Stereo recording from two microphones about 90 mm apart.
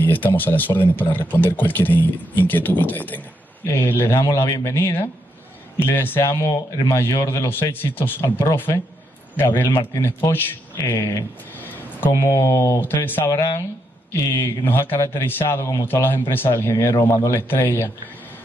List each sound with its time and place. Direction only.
0.0 s speech: 20° left (ahead or behind)
12.1 s speech: 35° left (ahead or behind)
12.8 s speech: 25° left (ahead or behind)